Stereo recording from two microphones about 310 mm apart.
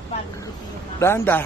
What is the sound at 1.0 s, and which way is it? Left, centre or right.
Speech, centre.